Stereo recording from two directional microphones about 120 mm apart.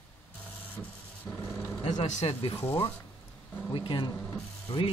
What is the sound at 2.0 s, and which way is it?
Speech, 60° left (ahead or behind).